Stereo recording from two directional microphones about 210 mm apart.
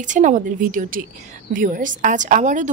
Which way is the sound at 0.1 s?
35° right (ahead or behind).